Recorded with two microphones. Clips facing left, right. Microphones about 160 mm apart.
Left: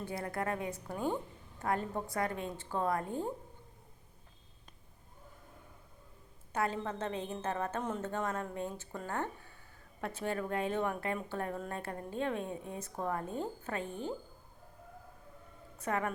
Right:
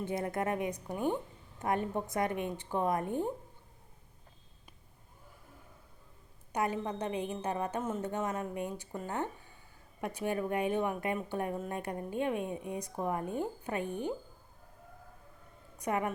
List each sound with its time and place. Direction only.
0.0 s a woman's voice: 20° right (ahead or behind)
6.5 s a woman's voice: 15° right (ahead or behind)
15.8 s a woman's voice: 15° right (ahead or behind)